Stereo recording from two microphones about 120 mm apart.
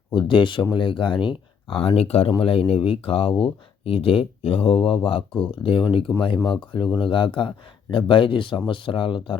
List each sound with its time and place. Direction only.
0.1 s speech: 45° left (ahead or behind)